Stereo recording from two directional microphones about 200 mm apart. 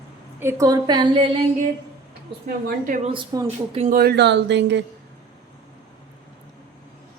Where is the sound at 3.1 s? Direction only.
25° right (ahead or behind).